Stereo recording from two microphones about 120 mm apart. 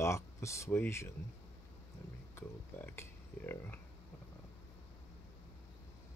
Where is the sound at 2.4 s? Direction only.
15° left (ahead or behind).